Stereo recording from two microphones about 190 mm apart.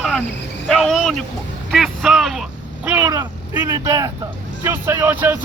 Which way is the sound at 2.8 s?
15° right (ahead or behind).